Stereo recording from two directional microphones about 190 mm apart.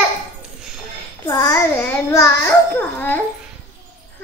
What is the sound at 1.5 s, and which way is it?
Speech, 5° left (ahead or behind).